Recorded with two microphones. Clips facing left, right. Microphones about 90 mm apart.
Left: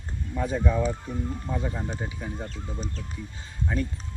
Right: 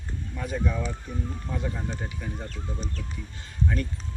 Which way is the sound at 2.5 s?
30° left (ahead or behind).